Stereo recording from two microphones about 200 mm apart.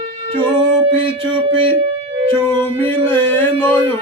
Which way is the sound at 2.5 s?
10° left (ahead or behind).